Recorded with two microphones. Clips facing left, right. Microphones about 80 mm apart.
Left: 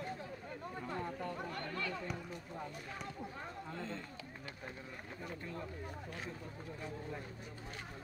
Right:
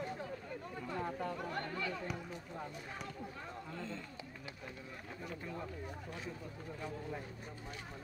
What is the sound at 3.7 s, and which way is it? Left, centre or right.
Speech, left.